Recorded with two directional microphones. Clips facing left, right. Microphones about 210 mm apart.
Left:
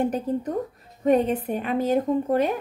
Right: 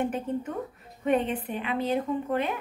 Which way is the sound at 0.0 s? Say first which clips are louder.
Left 4 dB; 40° left (ahead or behind).